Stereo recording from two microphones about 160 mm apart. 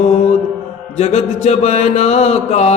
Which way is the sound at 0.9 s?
40° left (ahead or behind).